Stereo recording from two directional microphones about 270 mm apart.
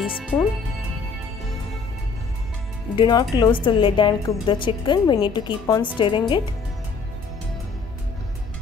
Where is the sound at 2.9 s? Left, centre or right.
Centre.